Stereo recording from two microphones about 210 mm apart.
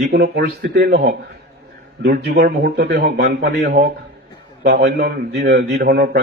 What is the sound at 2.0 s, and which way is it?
A man's voice, 50° right (ahead or behind).